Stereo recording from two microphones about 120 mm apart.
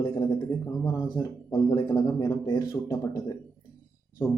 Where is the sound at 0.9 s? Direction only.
40° left (ahead or behind).